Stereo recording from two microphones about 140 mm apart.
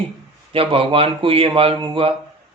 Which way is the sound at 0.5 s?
40° right (ahead or behind).